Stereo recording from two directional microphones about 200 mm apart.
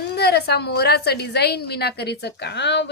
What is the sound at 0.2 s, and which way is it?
A woman's voice, 55° left (ahead or behind).